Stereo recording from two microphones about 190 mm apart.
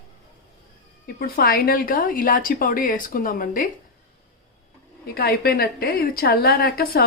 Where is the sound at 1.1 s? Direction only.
55° left (ahead or behind).